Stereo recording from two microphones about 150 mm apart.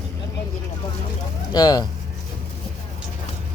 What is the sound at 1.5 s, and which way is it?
Speech, 25° left (ahead or behind).